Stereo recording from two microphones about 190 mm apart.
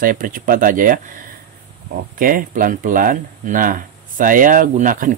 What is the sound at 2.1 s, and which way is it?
Speech, 45° right (ahead or behind).